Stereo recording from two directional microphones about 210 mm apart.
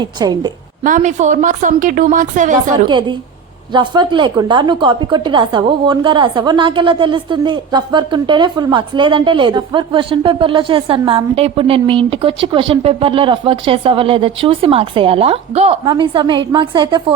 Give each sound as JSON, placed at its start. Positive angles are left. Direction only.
{"t": 0.0, "sound": "a woman's voice", "side_deg": -20}
{"t": 0.9, "sound": "a woman's voice", "side_deg": -35}
{"t": 2.8, "sound": "a woman's voice", "side_deg": -25}